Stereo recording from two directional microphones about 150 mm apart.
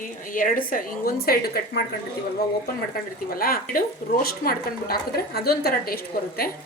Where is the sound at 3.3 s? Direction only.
75° left (ahead or behind).